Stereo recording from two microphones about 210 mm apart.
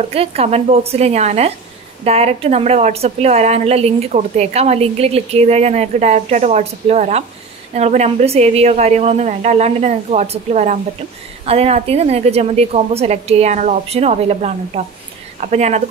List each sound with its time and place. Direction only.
0.1 s a woman's voice: 30° right (ahead or behind)